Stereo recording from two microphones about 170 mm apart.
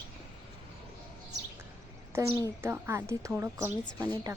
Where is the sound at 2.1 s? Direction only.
15° right (ahead or behind).